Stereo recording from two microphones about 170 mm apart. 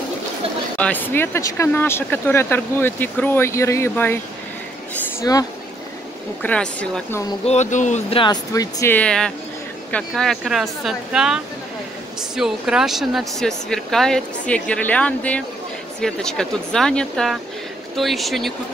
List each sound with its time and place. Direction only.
0.7 s speech: 10° left (ahead or behind)
5.3 s speech: 20° left (ahead or behind)
6.4 s speech: 5° left (ahead or behind)
7.4 s speech: 45° left (ahead or behind)
8.2 s speech: 20° left (ahead or behind)
8.9 s speech: 5° left (ahead or behind)